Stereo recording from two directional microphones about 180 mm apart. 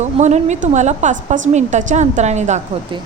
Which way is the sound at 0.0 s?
40° right (ahead or behind).